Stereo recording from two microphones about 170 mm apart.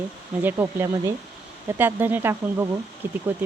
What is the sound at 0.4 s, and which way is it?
Speech, 15° right (ahead or behind).